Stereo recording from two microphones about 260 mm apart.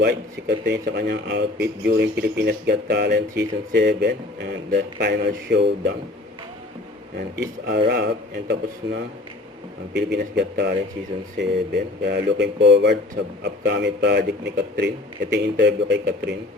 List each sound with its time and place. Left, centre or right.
0.0 s speech: right
7.9 s speech: right